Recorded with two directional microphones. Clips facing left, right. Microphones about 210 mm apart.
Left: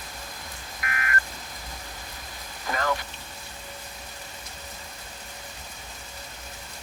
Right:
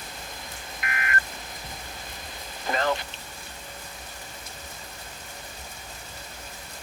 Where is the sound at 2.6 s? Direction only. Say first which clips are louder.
Right 2 dB; 25° right (ahead or behind).